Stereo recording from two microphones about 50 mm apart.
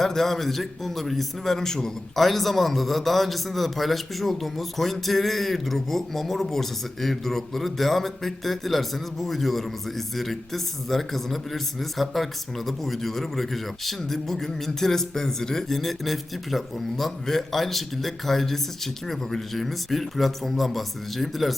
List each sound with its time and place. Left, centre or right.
0.0 s a man's voice: centre